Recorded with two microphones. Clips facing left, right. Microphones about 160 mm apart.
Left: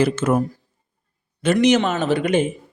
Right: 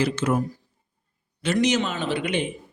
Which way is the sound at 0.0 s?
50° left (ahead or behind).